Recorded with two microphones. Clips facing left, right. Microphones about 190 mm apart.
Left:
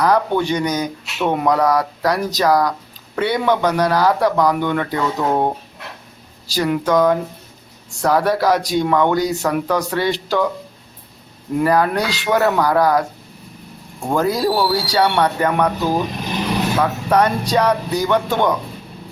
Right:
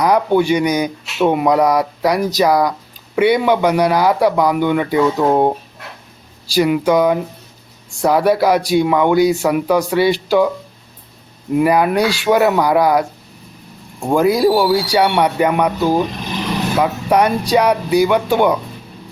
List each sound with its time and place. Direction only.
0.0 s speech: 10° right (ahead or behind)
6.5 s speech: 10° right (ahead or behind)
11.6 s speech: 15° right (ahead or behind)
16.7 s speech: 15° right (ahead or behind)